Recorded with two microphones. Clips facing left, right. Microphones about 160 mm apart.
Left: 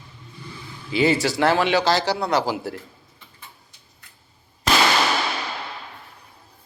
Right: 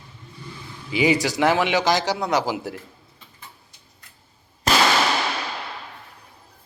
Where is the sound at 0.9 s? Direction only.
15° right (ahead or behind).